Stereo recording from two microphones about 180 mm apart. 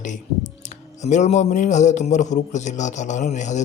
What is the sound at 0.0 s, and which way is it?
A man's voice, 45° left (ahead or behind).